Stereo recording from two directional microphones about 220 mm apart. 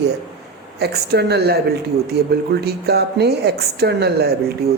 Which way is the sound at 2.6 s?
45° right (ahead or behind).